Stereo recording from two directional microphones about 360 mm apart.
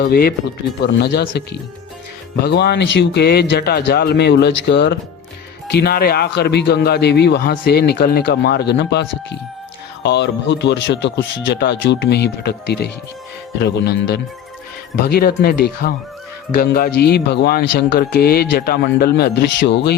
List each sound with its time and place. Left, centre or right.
0.0 s a man's voice: left